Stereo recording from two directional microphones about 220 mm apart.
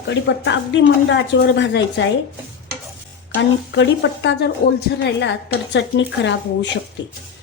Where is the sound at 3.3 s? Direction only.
55° left (ahead or behind).